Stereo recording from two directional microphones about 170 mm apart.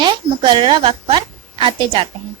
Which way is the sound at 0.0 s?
25° right (ahead or behind).